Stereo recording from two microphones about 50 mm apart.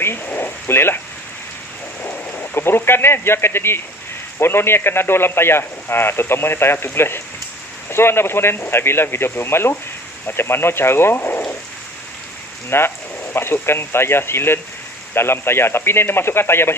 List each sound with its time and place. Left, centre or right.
0.0 s a sound: left
2.5 s a man's voice: left
12.6 s a man's voice: left